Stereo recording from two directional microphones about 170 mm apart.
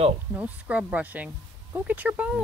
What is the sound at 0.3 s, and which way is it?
Speech, 10° right (ahead or behind).